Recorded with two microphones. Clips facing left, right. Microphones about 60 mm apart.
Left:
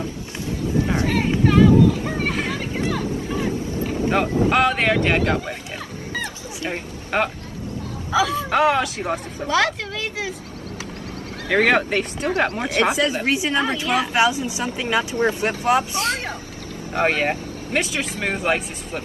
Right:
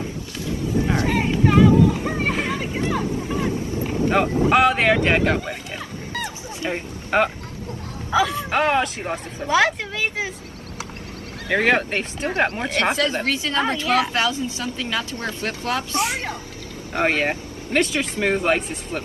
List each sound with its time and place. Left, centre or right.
1.0 s vehicle: centre
4.1 s speech: centre
6.7 s speech: centre
9.5 s speech: centre
11.4 s speech: centre
12.6 s speech: centre
16.9 s speech: centre